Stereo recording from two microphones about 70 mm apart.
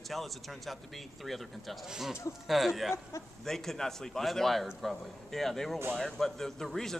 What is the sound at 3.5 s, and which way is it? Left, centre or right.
A man's voice, centre.